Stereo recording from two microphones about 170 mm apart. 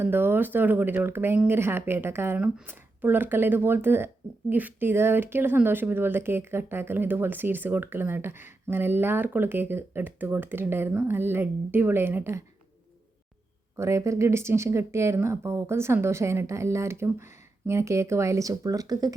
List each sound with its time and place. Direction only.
0.0 s speech: 10° right (ahead or behind)
13.7 s speech: 15° right (ahead or behind)